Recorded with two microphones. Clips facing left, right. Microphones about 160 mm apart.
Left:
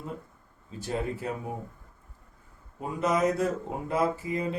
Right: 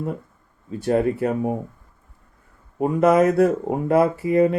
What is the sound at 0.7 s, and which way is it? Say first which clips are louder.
Speech: right 12 dB; 60° right (ahead or behind).